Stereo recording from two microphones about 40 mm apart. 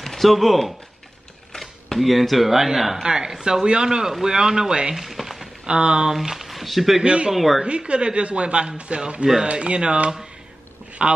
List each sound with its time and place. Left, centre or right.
0.0 s a woman's voice: centre
4.9 s speech: centre
5.7 s a woman's voice: right
6.1 s speech: centre
7.0 s a woman's voice: right
7.3 s a woman's voice: centre
7.6 s a woman's voice: right
10.9 s a sound: right